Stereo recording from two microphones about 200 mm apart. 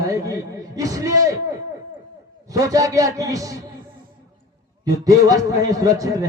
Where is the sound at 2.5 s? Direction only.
15° right (ahead or behind).